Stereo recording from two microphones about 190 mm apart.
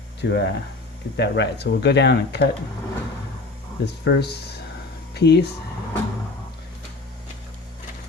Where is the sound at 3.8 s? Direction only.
60° left (ahead or behind).